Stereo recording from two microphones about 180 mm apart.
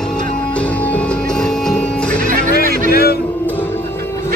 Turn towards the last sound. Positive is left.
turn(degrees=60)  # may be behind; listen again after turning